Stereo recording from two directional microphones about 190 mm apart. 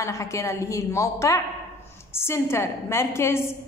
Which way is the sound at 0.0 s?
15° left (ahead or behind).